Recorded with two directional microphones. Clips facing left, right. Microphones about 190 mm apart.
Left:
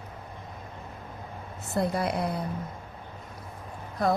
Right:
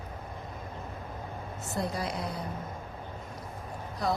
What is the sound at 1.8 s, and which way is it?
Speech, 60° left (ahead or behind).